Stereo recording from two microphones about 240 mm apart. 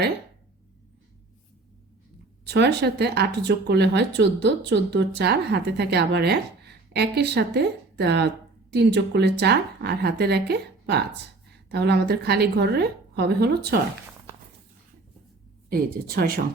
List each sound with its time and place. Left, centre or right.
2.5 s speech: right
15.7 s speech: right